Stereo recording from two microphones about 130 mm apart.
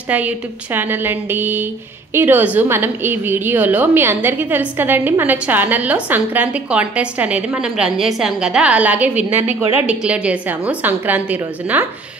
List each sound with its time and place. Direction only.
0.7 s a woman's voice: 15° right (ahead or behind)